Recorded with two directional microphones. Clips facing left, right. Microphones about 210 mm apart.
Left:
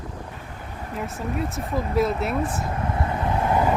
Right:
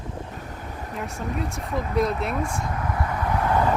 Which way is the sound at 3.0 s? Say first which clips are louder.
Left 1 dB; 25° left (ahead or behind).